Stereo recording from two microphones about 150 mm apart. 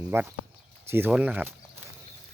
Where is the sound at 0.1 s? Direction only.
15° right (ahead or behind).